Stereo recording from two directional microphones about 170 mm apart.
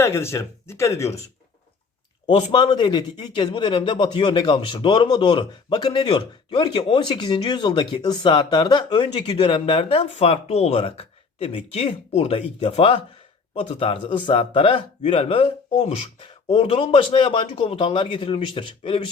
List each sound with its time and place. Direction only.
0.0 s speech: 15° left (ahead or behind)
2.2 s speech: 30° left (ahead or behind)